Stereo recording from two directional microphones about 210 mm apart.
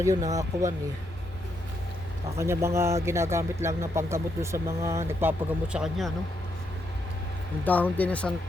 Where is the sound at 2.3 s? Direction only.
15° right (ahead or behind).